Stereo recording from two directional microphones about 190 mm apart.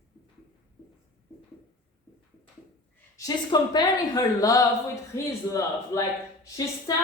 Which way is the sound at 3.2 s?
20° left (ahead or behind).